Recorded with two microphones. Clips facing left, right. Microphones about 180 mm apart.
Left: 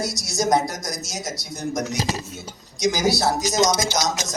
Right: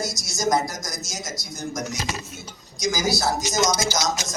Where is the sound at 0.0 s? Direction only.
65° left (ahead or behind).